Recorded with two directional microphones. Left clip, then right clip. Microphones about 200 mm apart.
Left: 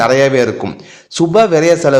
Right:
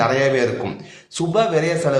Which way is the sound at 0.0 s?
40° left (ahead or behind).